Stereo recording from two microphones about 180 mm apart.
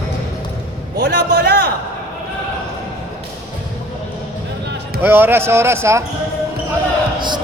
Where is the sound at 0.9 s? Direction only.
60° right (ahead or behind).